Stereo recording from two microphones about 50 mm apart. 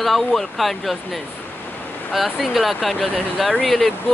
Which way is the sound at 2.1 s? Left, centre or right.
Centre.